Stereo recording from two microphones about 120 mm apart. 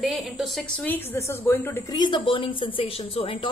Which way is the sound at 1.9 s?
40° left (ahead or behind).